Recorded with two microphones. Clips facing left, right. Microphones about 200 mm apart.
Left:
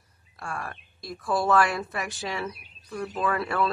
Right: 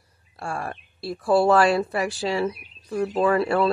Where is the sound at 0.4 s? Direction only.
30° right (ahead or behind).